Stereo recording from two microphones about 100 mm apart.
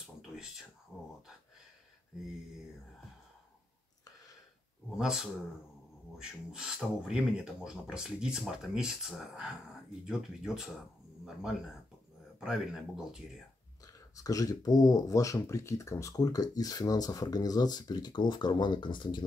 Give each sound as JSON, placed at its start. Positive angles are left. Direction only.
{"t": 4.9, "sound": "speech", "side_deg": -5}
{"t": 14.1, "sound": "speech", "side_deg": 35}